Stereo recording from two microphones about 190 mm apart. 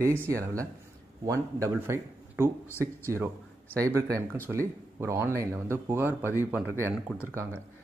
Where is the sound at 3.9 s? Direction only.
15° right (ahead or behind).